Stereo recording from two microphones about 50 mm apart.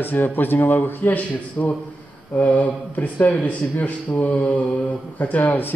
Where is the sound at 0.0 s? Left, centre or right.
Left.